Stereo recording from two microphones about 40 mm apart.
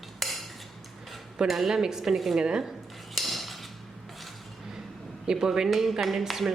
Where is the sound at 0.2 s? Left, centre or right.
Centre.